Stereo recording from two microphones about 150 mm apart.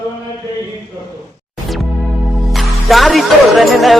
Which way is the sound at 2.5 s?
Centre (ahead or behind).